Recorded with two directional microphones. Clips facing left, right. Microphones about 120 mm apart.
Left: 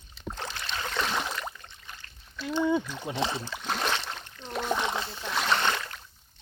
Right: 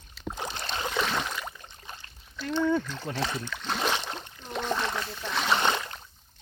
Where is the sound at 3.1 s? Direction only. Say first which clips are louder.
Left 2 dB; 20° left (ahead or behind).